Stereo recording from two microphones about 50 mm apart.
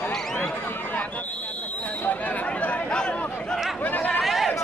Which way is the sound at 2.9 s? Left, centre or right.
Centre.